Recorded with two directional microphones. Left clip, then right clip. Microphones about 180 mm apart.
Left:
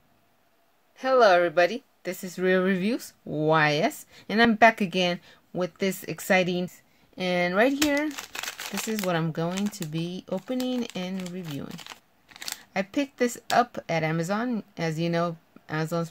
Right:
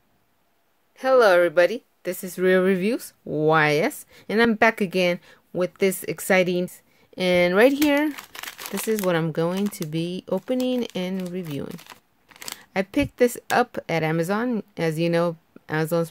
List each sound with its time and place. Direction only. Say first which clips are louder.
0.9 s speech: right 3 dB; 30° right (ahead or behind)
6.7 s speech: right 5 dB; 55° right (ahead or behind)
8.6 s speech: right 9 dB; 10° right (ahead or behind)
9.0 s speech: right 4 dB; 40° right (ahead or behind)
11.9 s crumpling: left 1 dB; 15° right (ahead or behind)
12.7 s speech: right 5 dB; 35° right (ahead or behind)